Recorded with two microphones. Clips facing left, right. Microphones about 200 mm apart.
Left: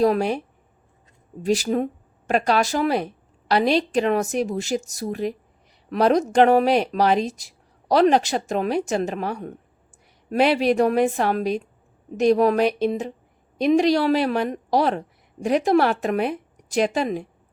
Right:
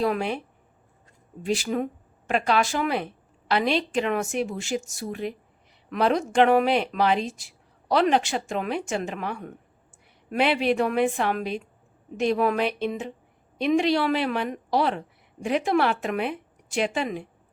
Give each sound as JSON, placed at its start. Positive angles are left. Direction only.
{"t": 0.0, "sound": "speech", "side_deg": 40}